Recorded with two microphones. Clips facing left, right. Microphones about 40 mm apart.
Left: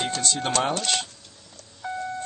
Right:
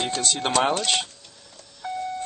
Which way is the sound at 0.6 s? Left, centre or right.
Centre.